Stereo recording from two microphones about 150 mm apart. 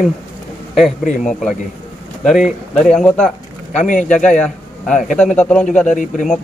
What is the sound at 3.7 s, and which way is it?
Speech, 55° left (ahead or behind).